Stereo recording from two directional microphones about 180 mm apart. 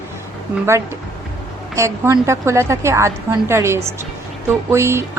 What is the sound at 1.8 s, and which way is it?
Speech, 15° right (ahead or behind).